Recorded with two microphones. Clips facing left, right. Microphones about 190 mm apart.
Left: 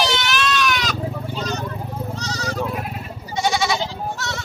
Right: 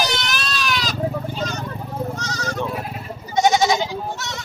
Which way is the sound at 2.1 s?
50° right (ahead or behind).